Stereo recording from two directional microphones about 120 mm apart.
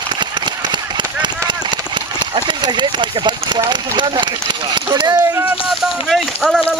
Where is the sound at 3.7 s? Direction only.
40° right (ahead or behind).